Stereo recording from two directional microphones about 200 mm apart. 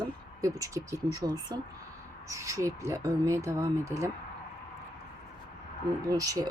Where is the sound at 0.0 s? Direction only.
15° right (ahead or behind).